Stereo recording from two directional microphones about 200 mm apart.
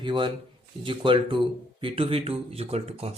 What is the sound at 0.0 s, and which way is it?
A man's voice, 25° right (ahead or behind).